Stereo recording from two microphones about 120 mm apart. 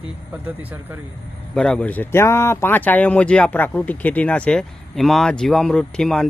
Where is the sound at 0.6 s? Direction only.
15° right (ahead or behind).